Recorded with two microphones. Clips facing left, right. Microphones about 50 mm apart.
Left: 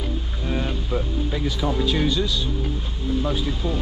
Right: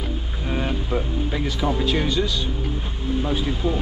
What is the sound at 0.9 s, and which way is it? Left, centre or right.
Speech, centre.